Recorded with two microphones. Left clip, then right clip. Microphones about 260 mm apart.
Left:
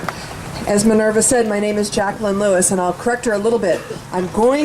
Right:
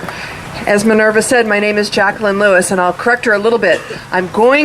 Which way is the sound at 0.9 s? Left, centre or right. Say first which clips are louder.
Right 4 dB; centre.